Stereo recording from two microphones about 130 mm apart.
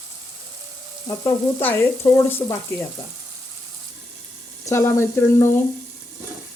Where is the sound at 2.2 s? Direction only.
15° left (ahead or behind).